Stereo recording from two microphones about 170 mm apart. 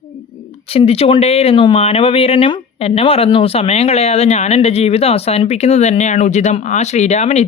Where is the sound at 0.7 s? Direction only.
35° left (ahead or behind).